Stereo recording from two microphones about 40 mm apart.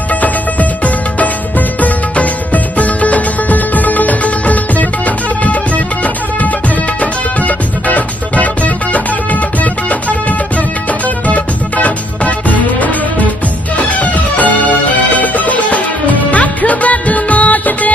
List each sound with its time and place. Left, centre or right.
0.1 s music: left
7.0 s music: left